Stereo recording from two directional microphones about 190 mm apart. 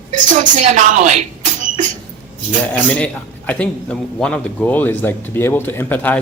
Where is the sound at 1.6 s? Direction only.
40° right (ahead or behind).